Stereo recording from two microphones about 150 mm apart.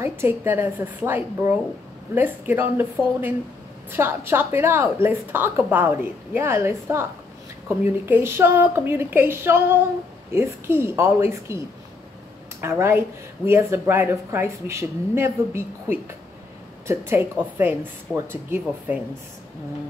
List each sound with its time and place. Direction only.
0.0 s a woman's voice: 15° right (ahead or behind)